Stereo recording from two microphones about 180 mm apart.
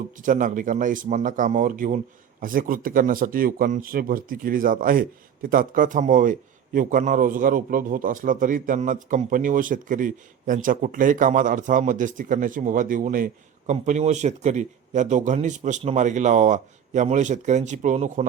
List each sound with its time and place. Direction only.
0.2 s a man's voice: 45° right (ahead or behind)